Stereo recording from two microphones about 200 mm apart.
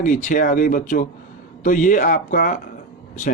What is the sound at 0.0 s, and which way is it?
Speech, 40° left (ahead or behind).